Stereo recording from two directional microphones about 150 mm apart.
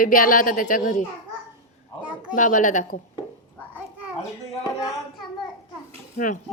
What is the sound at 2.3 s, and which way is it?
Speech, 60° left (ahead or behind).